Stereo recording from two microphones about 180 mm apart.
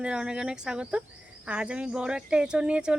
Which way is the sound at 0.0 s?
5° right (ahead or behind).